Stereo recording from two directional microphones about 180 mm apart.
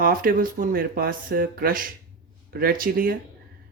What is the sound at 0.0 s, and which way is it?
Speech, 55° right (ahead or behind).